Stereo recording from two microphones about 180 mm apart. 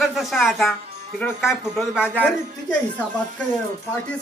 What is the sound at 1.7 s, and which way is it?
Speech, 5° right (ahead or behind).